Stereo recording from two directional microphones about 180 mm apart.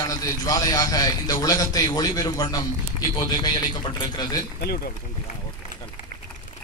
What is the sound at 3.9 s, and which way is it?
Speech, 25° left (ahead or behind).